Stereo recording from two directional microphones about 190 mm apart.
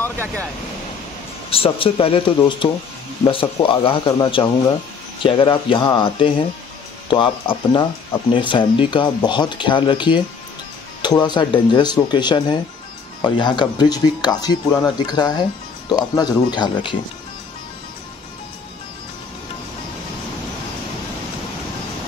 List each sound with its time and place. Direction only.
1.5 s speech: 30° left (ahead or behind)